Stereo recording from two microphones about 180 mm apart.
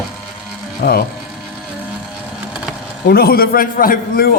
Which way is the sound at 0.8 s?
60° left (ahead or behind).